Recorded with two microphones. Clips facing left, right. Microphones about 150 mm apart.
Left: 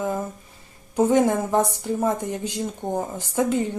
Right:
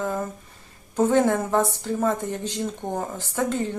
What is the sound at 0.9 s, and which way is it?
Speech, 10° left (ahead or behind).